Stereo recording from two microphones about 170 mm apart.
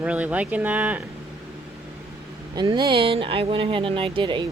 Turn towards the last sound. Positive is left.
turn(degrees=-30)  # may be behind; listen again after turning